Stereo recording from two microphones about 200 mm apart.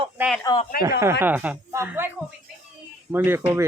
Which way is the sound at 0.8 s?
15° right (ahead or behind).